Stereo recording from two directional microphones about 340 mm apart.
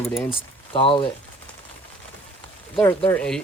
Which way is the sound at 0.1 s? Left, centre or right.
Centre.